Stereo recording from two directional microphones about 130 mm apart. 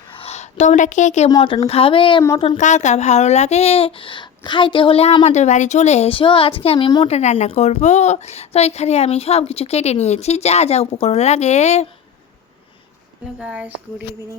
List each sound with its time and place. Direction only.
0.1 s speech: 50° left (ahead or behind); by 1.3 s 65° left (ahead or behind)
1.6 s speech: 45° left (ahead or behind)
2.6 s speech: 65° left (ahead or behind); by 5.1 s 45° left (ahead or behind)
5.2 s speech: 60° left (ahead or behind); by 7.2 s 40° left (ahead or behind)
7.2 s a woman's voice: 55° left (ahead or behind)
13.4 s speech: 10° right (ahead or behind)